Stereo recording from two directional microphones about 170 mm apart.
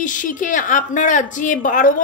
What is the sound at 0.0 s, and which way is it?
A woman's voice, 50° left (ahead or behind).